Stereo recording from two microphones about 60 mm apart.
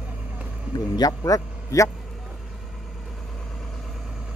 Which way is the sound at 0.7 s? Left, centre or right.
Left.